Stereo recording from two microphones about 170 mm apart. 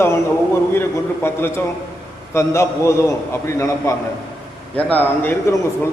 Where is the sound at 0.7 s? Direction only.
15° left (ahead or behind).